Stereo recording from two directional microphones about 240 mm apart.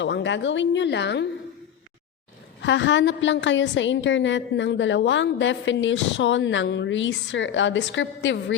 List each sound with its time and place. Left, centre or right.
0.0 s a woman's voice: left
2.6 s a woman's voice: left